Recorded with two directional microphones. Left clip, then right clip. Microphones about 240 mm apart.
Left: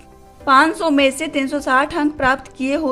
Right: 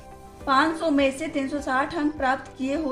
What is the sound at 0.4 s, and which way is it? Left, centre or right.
A woman's voice, left.